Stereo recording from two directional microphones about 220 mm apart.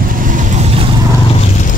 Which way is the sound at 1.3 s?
30° left (ahead or behind).